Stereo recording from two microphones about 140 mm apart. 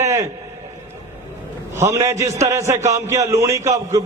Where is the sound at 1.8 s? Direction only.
20° right (ahead or behind).